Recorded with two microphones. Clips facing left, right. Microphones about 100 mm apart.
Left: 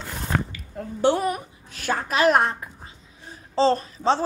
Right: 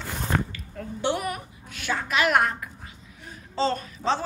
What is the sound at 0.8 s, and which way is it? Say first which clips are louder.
Speech: left 3 dB; 25° left (ahead or behind).